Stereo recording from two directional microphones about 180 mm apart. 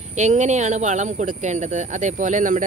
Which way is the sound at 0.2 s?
40° right (ahead or behind).